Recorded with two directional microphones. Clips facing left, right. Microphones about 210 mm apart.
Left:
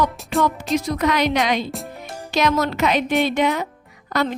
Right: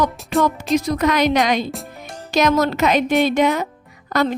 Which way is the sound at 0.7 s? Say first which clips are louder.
Right 3 dB; 45° right (ahead or behind).